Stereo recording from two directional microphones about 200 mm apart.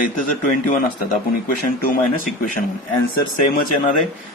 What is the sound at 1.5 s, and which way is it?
Speech, 40° left (ahead or behind).